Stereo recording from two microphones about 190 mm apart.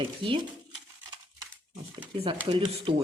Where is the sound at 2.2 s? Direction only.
25° right (ahead or behind).